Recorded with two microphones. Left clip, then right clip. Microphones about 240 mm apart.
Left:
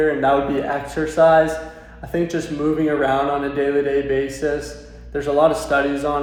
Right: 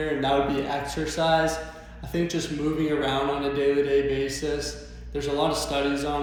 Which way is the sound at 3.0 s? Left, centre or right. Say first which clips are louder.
Left 7 dB; centre.